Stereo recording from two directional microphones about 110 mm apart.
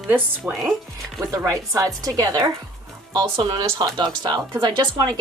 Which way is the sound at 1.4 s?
30° right (ahead or behind).